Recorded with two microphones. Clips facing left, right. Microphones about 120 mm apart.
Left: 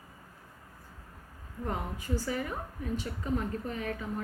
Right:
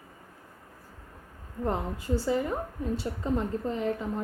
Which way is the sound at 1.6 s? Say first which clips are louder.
Right 5 dB; 30° right (ahead or behind).